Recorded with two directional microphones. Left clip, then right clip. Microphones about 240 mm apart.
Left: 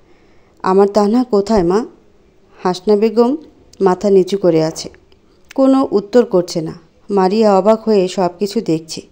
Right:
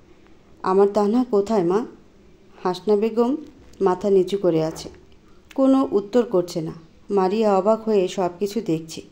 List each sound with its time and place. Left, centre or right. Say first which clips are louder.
0.6 s speech: left 6 dB; left